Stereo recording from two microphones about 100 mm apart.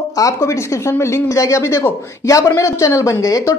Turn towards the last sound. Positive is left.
turn(degrees=35)  # may be behind; listen again after turning